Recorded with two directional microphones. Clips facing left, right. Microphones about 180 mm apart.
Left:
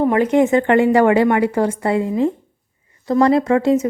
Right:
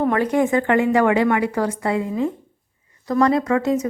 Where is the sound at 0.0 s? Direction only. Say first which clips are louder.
Left 4 dB; 15° left (ahead or behind).